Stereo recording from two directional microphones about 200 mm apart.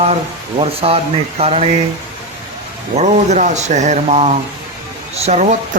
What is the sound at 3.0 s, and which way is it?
Speech, 35° right (ahead or behind).